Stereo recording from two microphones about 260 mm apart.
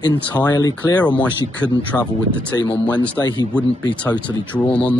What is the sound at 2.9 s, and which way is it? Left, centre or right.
Speech, centre.